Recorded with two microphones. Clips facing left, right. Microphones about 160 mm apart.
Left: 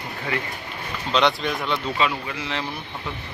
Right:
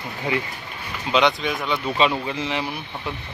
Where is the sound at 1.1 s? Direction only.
Centre (ahead or behind).